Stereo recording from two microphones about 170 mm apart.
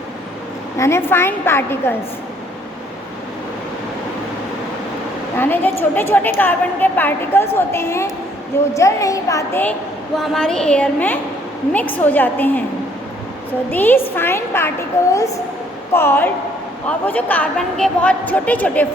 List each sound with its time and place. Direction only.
0.8 s a woman's voice: 15° left (ahead or behind)
5.4 s a woman's voice: 10° left (ahead or behind)
10.2 s a woman's voice: 5° left (ahead or behind)
13.7 s a woman's voice: 10° left (ahead or behind)